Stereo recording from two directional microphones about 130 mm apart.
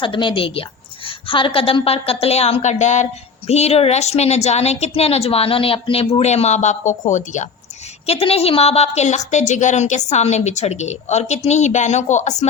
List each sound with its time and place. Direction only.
0.0 s a woman's voice: 40° left (ahead or behind); by 7.4 s 70° left (ahead or behind)
8.0 s a woman's voice: 50° left (ahead or behind); by 12.5 s 65° left (ahead or behind)